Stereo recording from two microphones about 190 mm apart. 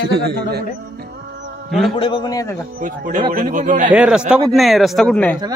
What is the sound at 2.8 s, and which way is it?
Speech, 45° right (ahead or behind).